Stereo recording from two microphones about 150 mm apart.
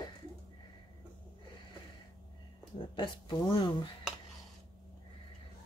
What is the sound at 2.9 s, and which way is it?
Speech, 35° left (ahead or behind).